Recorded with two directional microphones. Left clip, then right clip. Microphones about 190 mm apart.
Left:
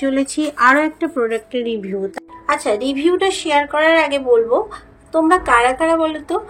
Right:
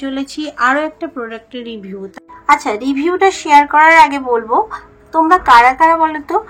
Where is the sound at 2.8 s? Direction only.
45° left (ahead or behind).